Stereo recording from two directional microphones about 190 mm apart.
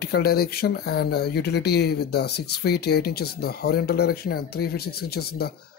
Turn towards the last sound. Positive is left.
turn(degrees=55)  # may be behind; listen again after turning